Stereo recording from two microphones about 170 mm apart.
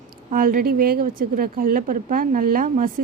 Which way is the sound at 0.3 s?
55° right (ahead or behind).